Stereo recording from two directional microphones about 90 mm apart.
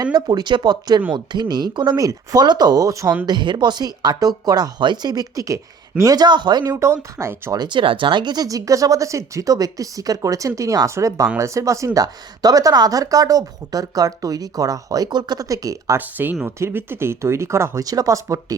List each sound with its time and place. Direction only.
0.0 s speech: 50° right (ahead or behind)
3.2 s speech: 55° right (ahead or behind)
6.7 s speech: 30° right (ahead or behind)
7.5 s speech: 55° right (ahead or behind); by 16.0 s 40° right (ahead or behind)
16.0 s speech: 20° right (ahead or behind)
17.8 s speech: 45° right (ahead or behind)